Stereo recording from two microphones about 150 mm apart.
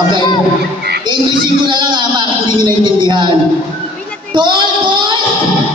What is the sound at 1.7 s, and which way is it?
Speech, 30° right (ahead or behind).